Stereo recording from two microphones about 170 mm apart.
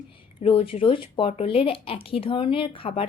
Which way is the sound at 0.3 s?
30° left (ahead or behind).